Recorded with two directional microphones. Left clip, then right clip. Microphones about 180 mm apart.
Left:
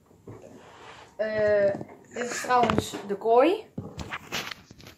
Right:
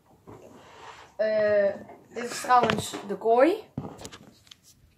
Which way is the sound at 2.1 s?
25° left (ahead or behind).